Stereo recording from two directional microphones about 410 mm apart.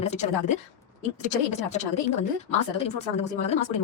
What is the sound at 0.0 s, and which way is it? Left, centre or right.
Speech, centre.